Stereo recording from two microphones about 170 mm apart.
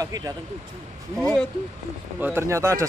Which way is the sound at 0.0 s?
20° right (ahead or behind).